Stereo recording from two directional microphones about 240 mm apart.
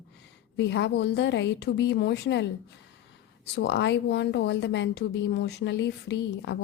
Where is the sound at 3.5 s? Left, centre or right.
Left.